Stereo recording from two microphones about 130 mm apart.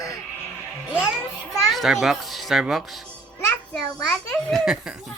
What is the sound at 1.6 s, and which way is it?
A child's voice, centre (ahead or behind).